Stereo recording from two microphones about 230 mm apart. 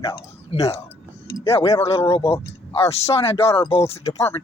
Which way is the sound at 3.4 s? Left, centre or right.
Centre.